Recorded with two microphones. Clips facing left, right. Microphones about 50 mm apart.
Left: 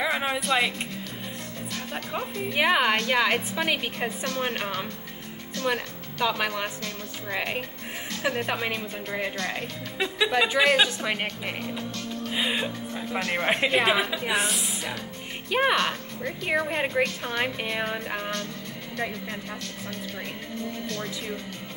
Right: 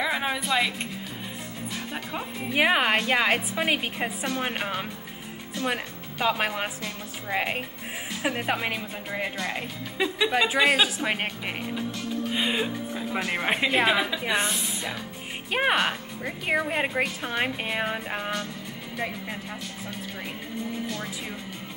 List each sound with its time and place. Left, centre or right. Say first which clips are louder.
0.0 s a sound: left 1 dB; centre
2.5 s a woman's voice: right 1 dB; centre
15.6 s speech: even; centre
20.7 s speech: even; centre